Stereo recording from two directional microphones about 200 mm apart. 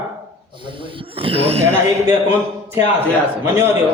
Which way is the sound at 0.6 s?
25° right (ahead or behind).